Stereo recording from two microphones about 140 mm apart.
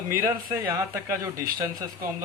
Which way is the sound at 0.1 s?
15° right (ahead or behind).